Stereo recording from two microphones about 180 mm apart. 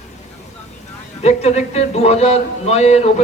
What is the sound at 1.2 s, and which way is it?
Speech, 35° left (ahead or behind).